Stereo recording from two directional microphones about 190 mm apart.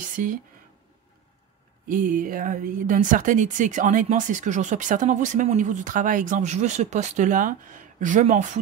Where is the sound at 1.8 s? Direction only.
45° right (ahead or behind).